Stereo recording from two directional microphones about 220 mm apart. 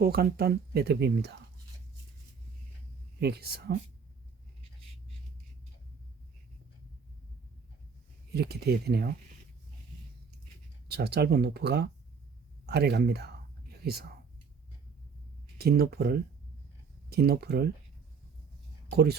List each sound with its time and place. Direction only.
0.0 s speech: 45° right (ahead or behind)
3.2 s speech: 45° right (ahead or behind)
8.3 s speech: 45° right (ahead or behind)
10.8 s speech: 45° right (ahead or behind)
15.5 s speech: 45° right (ahead or behind)